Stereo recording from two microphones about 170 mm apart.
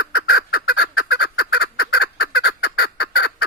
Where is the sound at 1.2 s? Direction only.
70° left (ahead or behind).